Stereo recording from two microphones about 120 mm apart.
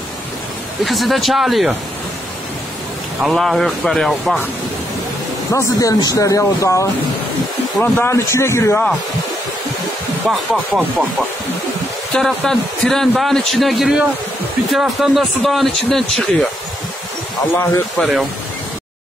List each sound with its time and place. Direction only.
0.8 s a man's voice: centre (ahead or behind)
3.2 s a man's voice: 5° right (ahead or behind)
5.5 s speech: 30° left (ahead or behind)
7.8 s speech: 15° left (ahead or behind)
10.3 s a man's voice: centre (ahead or behind)
12.2 s a man's voice: 5° left (ahead or behind)
17.5 s speech: 20° left (ahead or behind)
17.9 s a man's voice: centre (ahead or behind)